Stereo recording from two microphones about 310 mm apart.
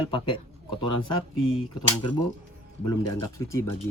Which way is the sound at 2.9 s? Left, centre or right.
Centre.